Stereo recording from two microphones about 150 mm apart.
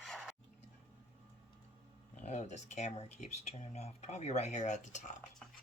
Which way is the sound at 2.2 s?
50° left (ahead or behind).